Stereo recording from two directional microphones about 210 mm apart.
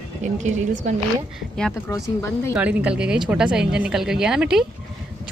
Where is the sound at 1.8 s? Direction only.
15° left (ahead or behind).